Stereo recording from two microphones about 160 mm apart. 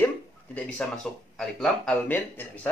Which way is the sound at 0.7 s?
5° left (ahead or behind).